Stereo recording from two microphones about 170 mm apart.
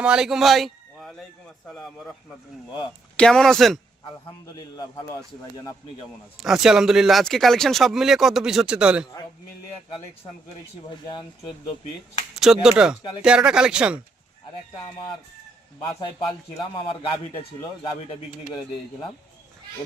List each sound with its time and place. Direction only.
0.0 s a man's voice: 5° right (ahead or behind)
3.2 s speech: 5° left (ahead or behind)
6.4 s speech: centre (ahead or behind)
10.8 s speech: 25° left (ahead or behind)
12.4 s speech: 5° right (ahead or behind)
15.8 s speech: 20° left (ahead or behind)